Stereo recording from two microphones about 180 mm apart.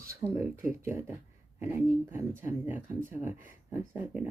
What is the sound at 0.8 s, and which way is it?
Speech, 15° right (ahead or behind).